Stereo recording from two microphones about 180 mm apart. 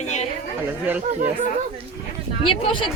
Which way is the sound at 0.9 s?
10° right (ahead or behind).